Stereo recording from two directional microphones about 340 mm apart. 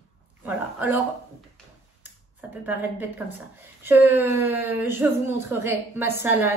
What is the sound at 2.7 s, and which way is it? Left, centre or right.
Speech, centre.